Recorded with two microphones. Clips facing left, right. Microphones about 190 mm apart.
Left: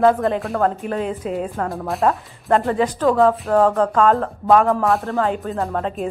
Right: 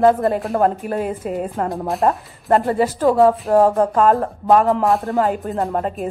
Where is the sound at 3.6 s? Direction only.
10° right (ahead or behind).